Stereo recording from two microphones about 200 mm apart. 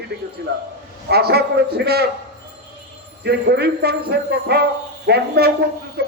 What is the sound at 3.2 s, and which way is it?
A woman's voice, 55° right (ahead or behind).